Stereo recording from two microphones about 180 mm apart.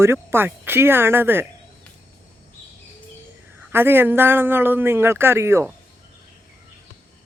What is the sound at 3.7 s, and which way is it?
Speech, 10° right (ahead or behind).